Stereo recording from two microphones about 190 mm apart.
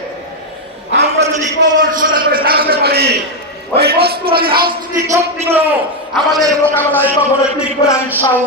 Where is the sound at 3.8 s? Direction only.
55° right (ahead or behind).